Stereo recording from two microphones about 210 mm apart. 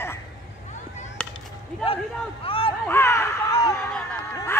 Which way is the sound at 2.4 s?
25° left (ahead or behind).